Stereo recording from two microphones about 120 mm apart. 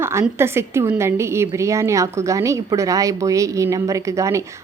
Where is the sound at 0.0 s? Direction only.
20° right (ahead or behind).